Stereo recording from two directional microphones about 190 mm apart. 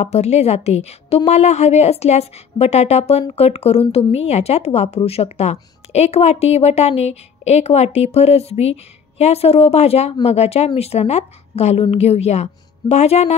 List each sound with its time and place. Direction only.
0.0 s a woman's voice: 35° left (ahead or behind)